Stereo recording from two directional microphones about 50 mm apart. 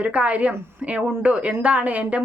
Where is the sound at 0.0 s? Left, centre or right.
Right.